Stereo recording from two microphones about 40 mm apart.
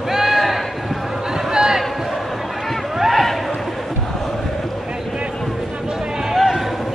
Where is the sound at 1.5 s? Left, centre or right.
Centre.